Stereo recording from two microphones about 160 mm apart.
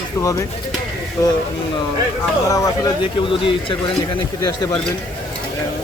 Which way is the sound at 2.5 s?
25° left (ahead or behind).